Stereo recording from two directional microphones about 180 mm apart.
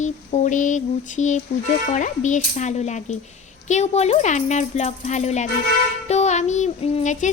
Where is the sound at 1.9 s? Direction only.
45° left (ahead or behind).